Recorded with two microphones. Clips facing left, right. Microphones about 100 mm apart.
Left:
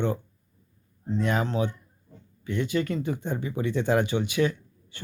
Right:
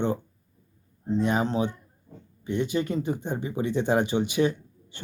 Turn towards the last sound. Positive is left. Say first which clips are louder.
# right 2 dB
turn(degrees=-20)  # may be behind; listen again after turning